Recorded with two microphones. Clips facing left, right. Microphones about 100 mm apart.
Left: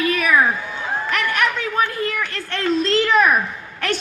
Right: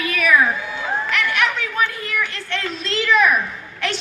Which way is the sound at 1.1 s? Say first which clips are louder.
Left 2 dB; 45° left (ahead or behind).